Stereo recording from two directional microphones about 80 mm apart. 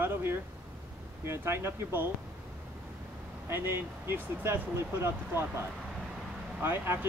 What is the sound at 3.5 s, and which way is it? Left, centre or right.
Speech, right.